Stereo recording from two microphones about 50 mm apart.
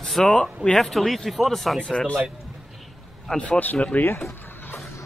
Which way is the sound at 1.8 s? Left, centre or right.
Centre.